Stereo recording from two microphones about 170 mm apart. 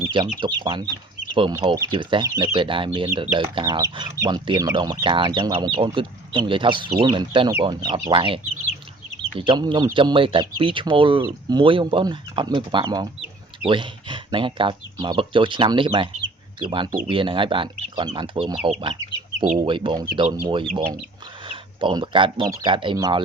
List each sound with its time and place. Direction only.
0.3 s speech: 25° right (ahead or behind)
1.7 s speech: 20° right (ahead or behind)
2.0 s speech: 30° right (ahead or behind)
9.5 s speech: 25° right (ahead or behind)